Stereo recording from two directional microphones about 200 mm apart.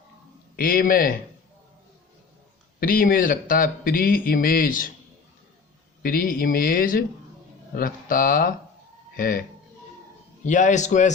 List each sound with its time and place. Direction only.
0.5 s a man's voice: 45° left (ahead or behind)
2.8 s a man's voice: 45° left (ahead or behind)
6.0 s a man's voice: 45° left (ahead or behind)
10.4 s a man's voice: 40° left (ahead or behind)